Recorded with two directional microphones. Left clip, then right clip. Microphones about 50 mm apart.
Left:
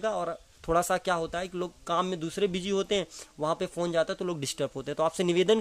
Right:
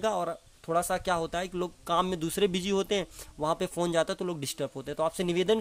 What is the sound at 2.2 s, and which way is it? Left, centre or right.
Speech, right.